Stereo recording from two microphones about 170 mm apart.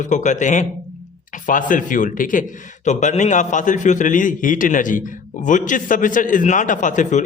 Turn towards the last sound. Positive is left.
turn(degrees=45)  # may be behind; listen again after turning